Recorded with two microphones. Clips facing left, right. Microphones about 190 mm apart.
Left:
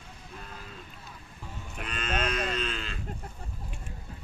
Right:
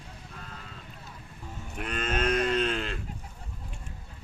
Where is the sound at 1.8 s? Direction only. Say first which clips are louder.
Right 3 dB; 50° right (ahead or behind).